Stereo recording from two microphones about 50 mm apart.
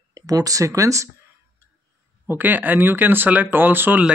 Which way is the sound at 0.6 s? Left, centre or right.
Right.